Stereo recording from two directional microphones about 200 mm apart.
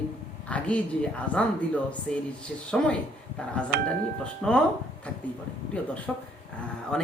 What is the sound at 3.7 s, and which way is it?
Speech, 45° right (ahead or behind).